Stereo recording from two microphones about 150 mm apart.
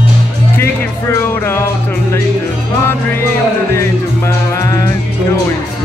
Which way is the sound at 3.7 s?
20° left (ahead or behind).